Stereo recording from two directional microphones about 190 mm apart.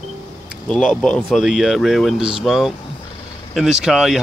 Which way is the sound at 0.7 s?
5° left (ahead or behind).